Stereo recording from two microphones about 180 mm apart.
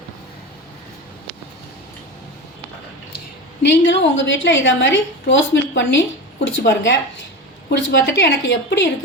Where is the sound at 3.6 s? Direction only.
80° left.